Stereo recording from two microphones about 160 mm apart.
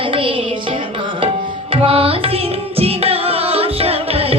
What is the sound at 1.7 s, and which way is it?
Music, 35° right (ahead or behind).